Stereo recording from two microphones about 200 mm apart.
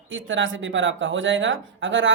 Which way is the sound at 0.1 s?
70° right (ahead or behind).